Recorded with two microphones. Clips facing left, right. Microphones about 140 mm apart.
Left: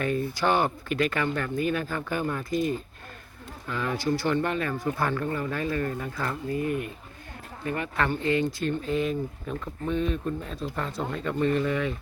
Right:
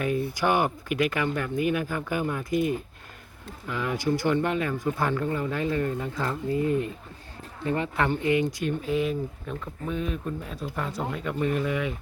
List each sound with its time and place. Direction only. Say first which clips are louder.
0.0 s speech: even; 10° right (ahead or behind)